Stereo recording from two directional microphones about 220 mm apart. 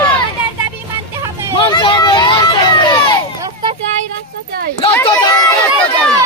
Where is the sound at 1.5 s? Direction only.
20° left (ahead or behind).